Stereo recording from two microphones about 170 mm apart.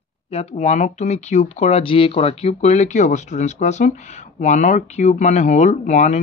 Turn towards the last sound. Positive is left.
turn(degrees=45)  # may be behind; listen again after turning